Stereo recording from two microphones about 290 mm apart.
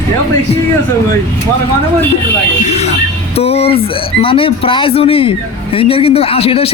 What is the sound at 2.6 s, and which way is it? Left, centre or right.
Speech, left.